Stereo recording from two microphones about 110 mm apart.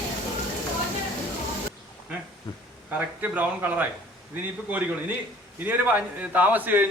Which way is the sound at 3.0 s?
15° right (ahead or behind).